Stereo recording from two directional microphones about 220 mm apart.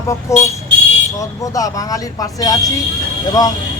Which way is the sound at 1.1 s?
15° left (ahead or behind).